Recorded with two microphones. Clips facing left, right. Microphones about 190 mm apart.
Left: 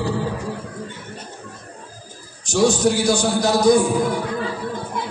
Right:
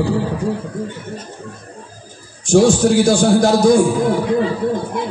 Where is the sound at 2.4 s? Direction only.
50° right (ahead or behind).